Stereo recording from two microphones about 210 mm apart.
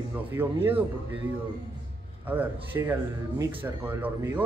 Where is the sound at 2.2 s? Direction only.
10° right (ahead or behind).